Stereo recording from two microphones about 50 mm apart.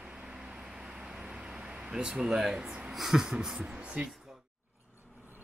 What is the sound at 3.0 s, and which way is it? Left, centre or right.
Speech, centre.